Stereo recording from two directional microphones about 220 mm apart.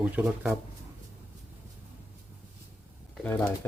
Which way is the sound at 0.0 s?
10° right (ahead or behind).